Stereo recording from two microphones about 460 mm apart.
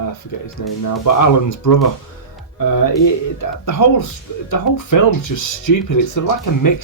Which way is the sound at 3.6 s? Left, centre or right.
Left.